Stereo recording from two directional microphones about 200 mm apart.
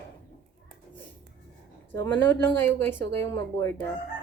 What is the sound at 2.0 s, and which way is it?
A woman's voice, 10° left (ahead or behind).